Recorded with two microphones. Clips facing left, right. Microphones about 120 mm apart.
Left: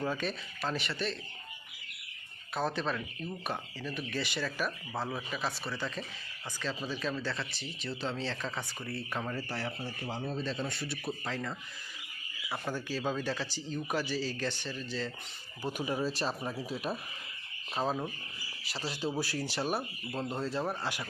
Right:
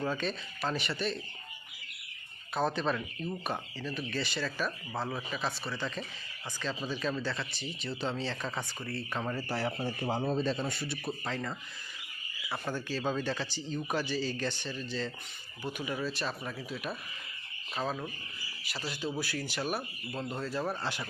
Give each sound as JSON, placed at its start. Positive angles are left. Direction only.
{"t": 0.0, "sound": "speech", "side_deg": 5}
{"t": 2.6, "sound": "speech", "side_deg": 0}
{"t": 8.9, "sound": "speech", "side_deg": 10}
{"t": 9.2, "sound": "speech", "side_deg": -10}
{"t": 10.0, "sound": "speech", "side_deg": -35}
{"t": 10.7, "sound": "speech", "side_deg": 0}
{"t": 15.6, "sound": "speech", "side_deg": 35}
{"t": 20.8, "sound": "speech", "side_deg": 10}